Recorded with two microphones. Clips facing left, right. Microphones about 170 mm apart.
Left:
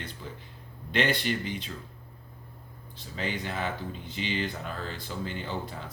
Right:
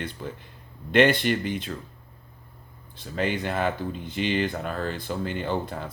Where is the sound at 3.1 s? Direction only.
60° right (ahead or behind).